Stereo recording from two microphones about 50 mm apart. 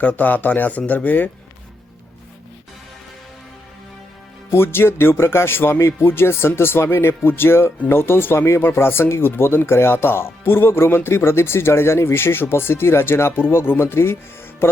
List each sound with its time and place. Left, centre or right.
0.0 s speech: left
4.5 s speech: left